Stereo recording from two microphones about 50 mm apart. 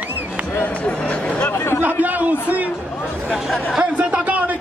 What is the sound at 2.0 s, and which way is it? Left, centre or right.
Speech, right.